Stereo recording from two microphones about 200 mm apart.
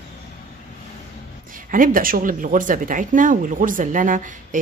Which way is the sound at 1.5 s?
45° right (ahead or behind).